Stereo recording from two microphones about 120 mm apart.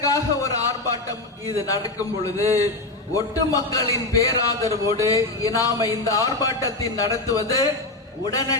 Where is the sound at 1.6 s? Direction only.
30° left (ahead or behind).